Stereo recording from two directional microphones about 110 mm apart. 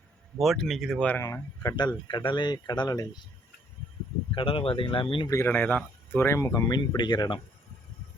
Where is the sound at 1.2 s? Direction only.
30° left (ahead or behind).